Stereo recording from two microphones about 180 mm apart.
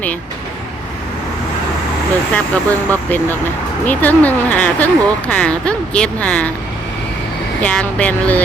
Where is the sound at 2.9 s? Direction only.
10° left (ahead or behind).